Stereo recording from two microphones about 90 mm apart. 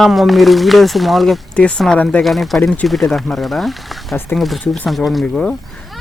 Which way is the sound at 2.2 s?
Centre (ahead or behind).